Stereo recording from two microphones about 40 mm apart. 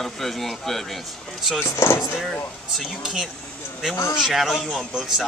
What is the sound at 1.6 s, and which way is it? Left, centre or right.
Speech, left.